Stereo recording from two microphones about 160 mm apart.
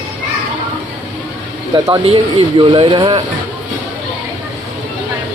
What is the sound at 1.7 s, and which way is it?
Speech, 25° right (ahead or behind).